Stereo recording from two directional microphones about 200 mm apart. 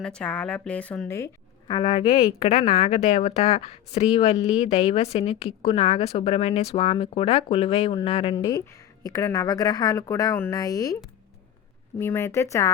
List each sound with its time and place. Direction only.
0.0 s a woman's voice: 5° left (ahead or behind)
11.9 s speech: 10° left (ahead or behind)